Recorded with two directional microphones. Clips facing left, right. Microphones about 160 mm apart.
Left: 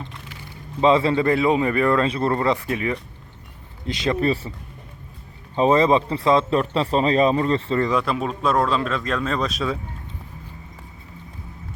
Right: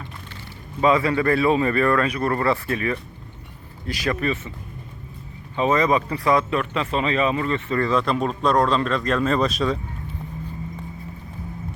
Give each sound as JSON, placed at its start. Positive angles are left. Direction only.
{"t": 0.8, "sound": "speech", "side_deg": 25}
{"t": 5.5, "sound": "speech", "side_deg": 30}
{"t": 7.8, "sound": "speech", "side_deg": 15}